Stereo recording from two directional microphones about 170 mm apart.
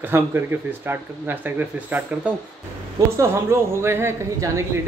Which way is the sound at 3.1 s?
15° right (ahead or behind).